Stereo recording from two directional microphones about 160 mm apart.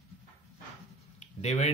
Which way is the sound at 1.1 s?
45° left (ahead or behind).